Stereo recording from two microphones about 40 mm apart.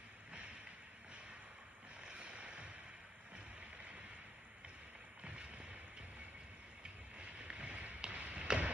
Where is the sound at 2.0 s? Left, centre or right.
Right.